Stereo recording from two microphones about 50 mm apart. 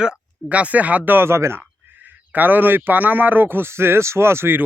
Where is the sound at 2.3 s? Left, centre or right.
Right.